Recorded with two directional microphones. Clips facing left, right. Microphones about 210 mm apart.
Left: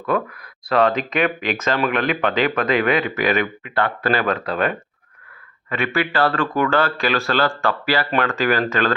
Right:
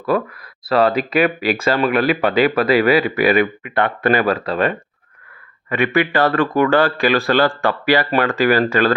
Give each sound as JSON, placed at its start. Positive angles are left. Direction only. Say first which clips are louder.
{"t": 0.0, "sound": "speech", "louder": "right 3 dB", "side_deg": -5}
{"t": 5.6, "sound": "speech", "louder": "right 5 dB", "side_deg": -15}